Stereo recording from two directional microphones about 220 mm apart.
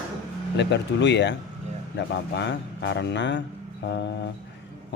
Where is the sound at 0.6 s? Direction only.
55° left (ahead or behind).